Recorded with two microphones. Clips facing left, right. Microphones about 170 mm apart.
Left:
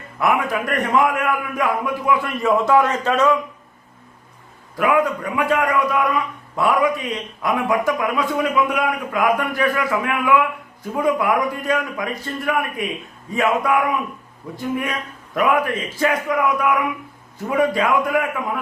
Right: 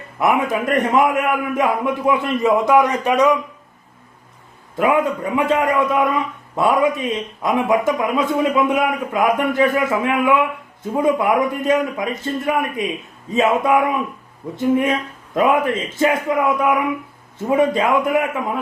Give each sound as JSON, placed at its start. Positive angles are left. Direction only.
{"t": 0.2, "sound": "speech", "side_deg": -20}
{"t": 4.8, "sound": "speech", "side_deg": -25}